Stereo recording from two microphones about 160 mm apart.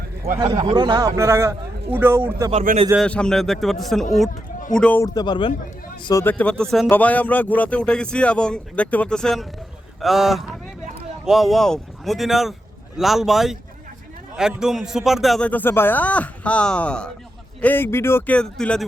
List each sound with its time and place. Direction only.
0.3 s a man's voice: 20° right (ahead or behind)
2.7 s speech: 60° right (ahead or behind)
3.0 s a man's voice: 5° left (ahead or behind)
5.0 s speech: 25° left (ahead or behind)
6.2 s a man's voice: 10° left (ahead or behind)